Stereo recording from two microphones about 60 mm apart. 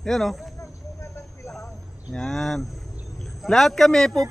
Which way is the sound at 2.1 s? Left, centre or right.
Centre.